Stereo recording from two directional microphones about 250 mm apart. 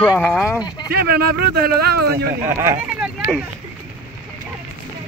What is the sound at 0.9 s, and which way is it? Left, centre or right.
Speech, right.